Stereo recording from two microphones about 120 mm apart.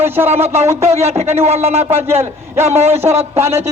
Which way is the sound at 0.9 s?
60° right (ahead or behind).